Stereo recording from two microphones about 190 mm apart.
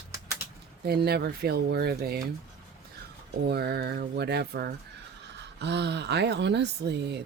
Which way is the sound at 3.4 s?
60° right (ahead or behind).